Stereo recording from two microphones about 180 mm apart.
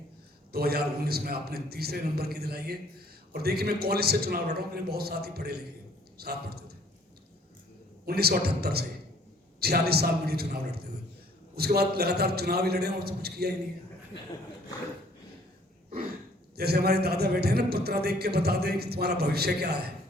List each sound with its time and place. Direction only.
0.5 s a man's voice: 60° right (ahead or behind)
8.0 s a man's voice: 60° right (ahead or behind)
16.6 s a man's voice: 60° right (ahead or behind)